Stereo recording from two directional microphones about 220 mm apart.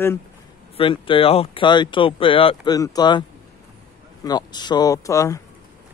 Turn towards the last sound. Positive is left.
turn(degrees=15)  # may be behind; listen again after turning